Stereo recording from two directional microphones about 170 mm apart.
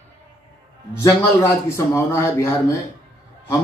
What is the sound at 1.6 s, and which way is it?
Speech, 15° left (ahead or behind).